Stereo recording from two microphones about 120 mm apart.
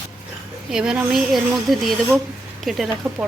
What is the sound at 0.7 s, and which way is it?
Speech, 5° right (ahead or behind).